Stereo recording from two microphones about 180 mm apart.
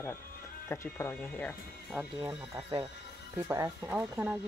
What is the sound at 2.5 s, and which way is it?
Speech, 20° right (ahead or behind).